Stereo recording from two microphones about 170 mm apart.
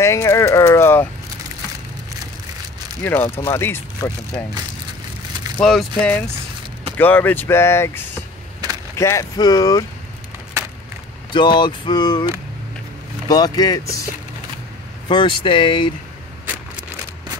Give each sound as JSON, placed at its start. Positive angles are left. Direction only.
{"t": 0.0, "sound": "speech", "side_deg": 15}
{"t": 3.0, "sound": "speech", "side_deg": 10}
{"t": 5.6, "sound": "speech", "side_deg": 0}
{"t": 11.3, "sound": "speech", "side_deg": 25}
{"t": 13.3, "sound": "speech", "side_deg": 20}
{"t": 15.0, "sound": "speech", "side_deg": 30}